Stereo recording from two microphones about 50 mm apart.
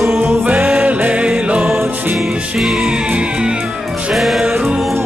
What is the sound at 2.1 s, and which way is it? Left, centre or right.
Music, centre.